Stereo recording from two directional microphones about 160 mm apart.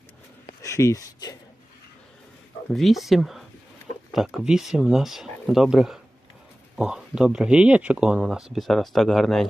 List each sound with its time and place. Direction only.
0.6 s speech: 20° left (ahead or behind)
2.7 s speech: centre (ahead or behind)